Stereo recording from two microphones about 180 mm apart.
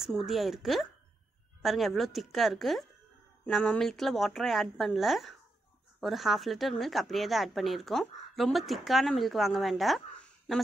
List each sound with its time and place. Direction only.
0.0 s speech: centre (ahead or behind)